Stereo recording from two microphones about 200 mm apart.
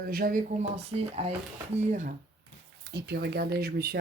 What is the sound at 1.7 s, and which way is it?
Speech, 35° right (ahead or behind).